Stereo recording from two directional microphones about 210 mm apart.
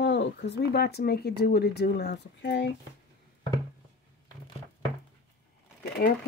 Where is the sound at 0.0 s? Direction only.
55° left (ahead or behind).